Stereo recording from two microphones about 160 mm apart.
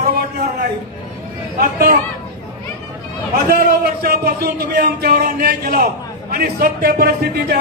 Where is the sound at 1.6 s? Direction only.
60° right (ahead or behind).